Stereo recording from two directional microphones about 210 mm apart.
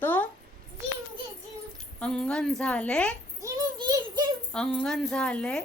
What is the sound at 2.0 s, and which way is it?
A woman's voice, 5° left (ahead or behind).